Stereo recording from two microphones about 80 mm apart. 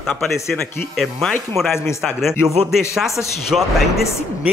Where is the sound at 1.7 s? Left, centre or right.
Left.